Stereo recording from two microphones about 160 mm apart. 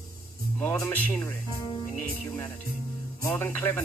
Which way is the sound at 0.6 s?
15° left (ahead or behind).